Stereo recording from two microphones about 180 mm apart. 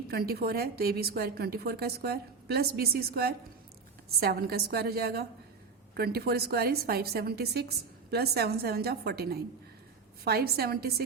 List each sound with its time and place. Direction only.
0.1 s a woman's voice: 60° right (ahead or behind)